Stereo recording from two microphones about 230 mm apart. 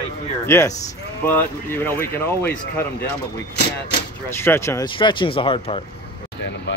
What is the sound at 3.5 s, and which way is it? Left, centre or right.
Speech, left.